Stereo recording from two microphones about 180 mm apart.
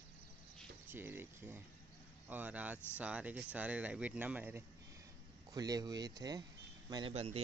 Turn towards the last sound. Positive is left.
turn(degrees=-35)  # may be behind; listen again after turning